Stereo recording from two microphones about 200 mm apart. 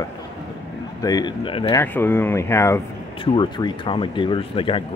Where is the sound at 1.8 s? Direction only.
10° left (ahead or behind).